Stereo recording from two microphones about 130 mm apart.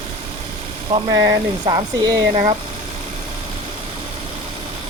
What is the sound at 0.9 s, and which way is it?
Speech, 30° right (ahead or behind).